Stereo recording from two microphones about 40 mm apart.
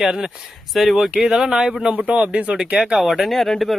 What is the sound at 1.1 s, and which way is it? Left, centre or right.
Speech, centre.